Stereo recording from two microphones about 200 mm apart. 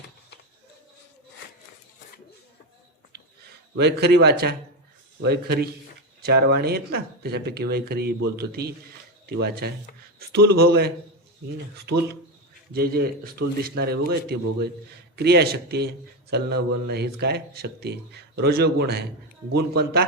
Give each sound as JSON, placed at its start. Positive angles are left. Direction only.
{"t": 3.8, "sound": "a man's voice", "side_deg": -55}
{"t": 12.7, "sound": "a man's voice", "side_deg": -50}